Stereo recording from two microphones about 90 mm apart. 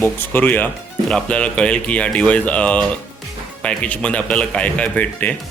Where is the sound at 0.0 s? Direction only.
20° left (ahead or behind).